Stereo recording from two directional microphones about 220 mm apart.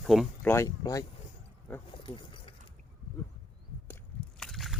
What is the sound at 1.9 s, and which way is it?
Keys jangling, 25° left (ahead or behind).